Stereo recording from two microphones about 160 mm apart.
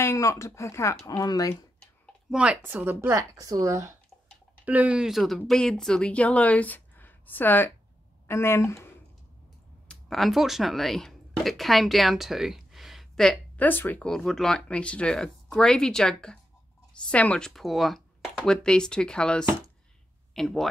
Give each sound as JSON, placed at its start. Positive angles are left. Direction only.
{"t": 0.0, "sound": "speech", "side_deg": 15}
{"t": 2.3, "sound": "speech", "side_deg": -5}
{"t": 9.8, "sound": "speech", "side_deg": 0}